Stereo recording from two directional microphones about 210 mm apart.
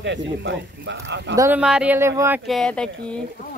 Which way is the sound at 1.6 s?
5° right (ahead or behind).